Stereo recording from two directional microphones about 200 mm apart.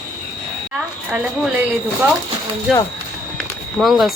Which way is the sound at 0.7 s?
5° right (ahead or behind).